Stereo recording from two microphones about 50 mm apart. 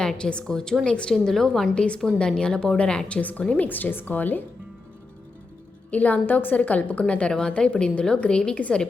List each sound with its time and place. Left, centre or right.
0.0 s a woman's voice: centre
1.1 s a woman's voice: centre
1.7 s a woman's voice: left
3.1 s a woman's voice: left
5.9 s a woman's voice: left